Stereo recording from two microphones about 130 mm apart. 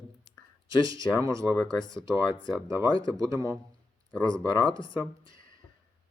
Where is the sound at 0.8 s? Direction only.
25° right (ahead or behind).